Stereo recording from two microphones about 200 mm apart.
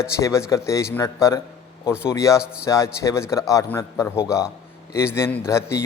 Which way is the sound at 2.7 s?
15° left (ahead or behind).